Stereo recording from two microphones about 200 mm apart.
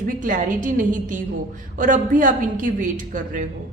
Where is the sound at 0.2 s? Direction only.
40° right (ahead or behind).